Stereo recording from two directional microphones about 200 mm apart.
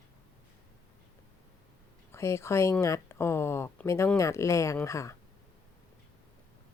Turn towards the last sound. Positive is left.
turn(degrees=15)  # may be behind; listen again after turning